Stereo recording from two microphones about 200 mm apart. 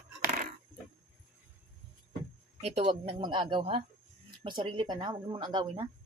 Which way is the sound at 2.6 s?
30° right (ahead or behind).